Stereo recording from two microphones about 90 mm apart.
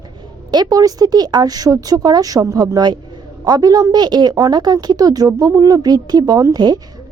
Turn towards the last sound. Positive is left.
turn(degrees=-50)  # may be behind; listen again after turning